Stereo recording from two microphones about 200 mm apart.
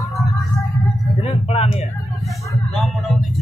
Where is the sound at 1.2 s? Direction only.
30° left (ahead or behind).